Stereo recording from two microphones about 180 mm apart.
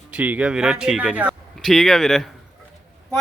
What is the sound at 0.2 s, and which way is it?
A man's voice, 5° right (ahead or behind).